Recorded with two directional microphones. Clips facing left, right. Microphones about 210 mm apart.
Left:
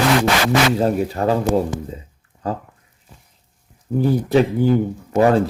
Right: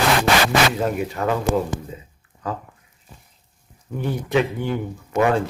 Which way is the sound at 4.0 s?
35° left (ahead or behind).